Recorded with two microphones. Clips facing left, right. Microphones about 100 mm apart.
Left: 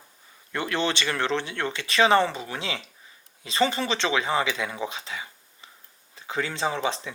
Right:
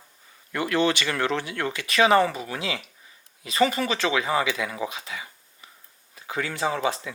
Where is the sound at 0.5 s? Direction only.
30° left (ahead or behind).